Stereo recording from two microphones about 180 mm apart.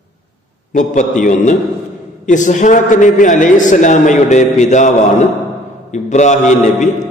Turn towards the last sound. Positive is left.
turn(degrees=40)  # may be behind; listen again after turning